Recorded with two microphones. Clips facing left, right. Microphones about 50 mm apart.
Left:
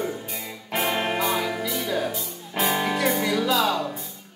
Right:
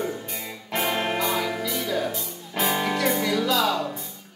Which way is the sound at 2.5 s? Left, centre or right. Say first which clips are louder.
Left 1 dB; centre.